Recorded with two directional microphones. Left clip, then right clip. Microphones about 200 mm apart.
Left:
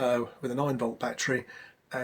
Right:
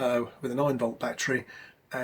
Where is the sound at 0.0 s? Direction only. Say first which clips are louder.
Even; 20° left (ahead or behind).